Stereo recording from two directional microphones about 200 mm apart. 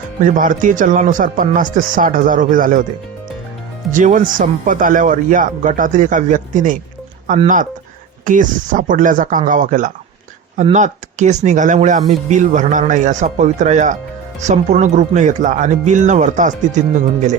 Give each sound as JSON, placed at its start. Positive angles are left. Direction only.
{"t": 0.3, "sound": "speech", "side_deg": -40}
{"t": 3.9, "sound": "speech", "side_deg": -40}